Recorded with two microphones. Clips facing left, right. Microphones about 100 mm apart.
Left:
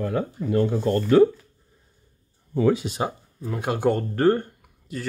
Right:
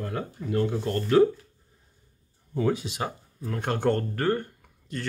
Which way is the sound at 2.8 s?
55° left (ahead or behind).